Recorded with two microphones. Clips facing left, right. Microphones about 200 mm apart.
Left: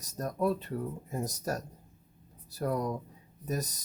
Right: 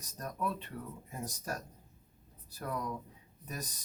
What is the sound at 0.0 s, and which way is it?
Speech, 40° left (ahead or behind).